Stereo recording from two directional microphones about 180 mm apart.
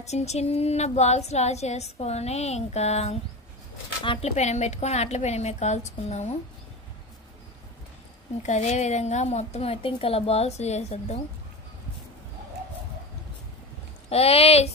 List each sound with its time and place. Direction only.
0.0 s speech: 40° left (ahead or behind)
8.4 s speech: 40° left (ahead or behind)
14.0 s speech: 35° left (ahead or behind)